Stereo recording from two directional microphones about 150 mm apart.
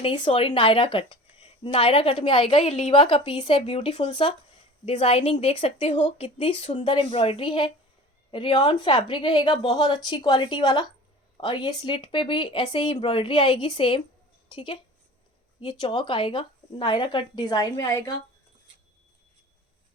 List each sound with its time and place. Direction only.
0.0 s a woman's voice: 35° left (ahead or behind)